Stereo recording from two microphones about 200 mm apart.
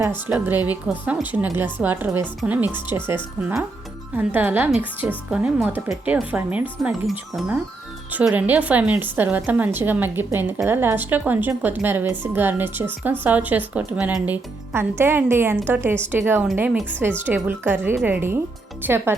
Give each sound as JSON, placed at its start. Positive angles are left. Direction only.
{"t": 0.0, "sound": "a woman's voice", "side_deg": -10}